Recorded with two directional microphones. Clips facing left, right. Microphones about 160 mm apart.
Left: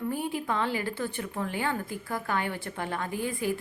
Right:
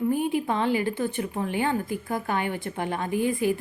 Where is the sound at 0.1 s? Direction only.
20° right (ahead or behind).